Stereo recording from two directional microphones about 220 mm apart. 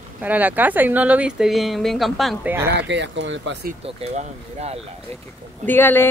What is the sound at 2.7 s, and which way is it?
Speech, 50° right (ahead or behind).